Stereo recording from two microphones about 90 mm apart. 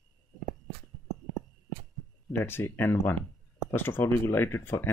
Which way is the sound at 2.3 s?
30° left (ahead or behind).